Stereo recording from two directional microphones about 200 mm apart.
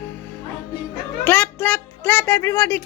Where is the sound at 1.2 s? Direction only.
10° left (ahead or behind).